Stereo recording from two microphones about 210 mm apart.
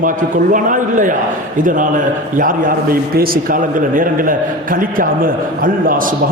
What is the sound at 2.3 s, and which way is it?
A man's voice, 40° right (ahead or behind).